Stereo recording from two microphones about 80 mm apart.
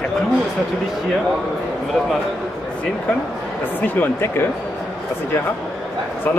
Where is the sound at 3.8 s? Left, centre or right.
Left.